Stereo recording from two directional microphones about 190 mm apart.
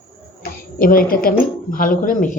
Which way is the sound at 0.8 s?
50° left (ahead or behind).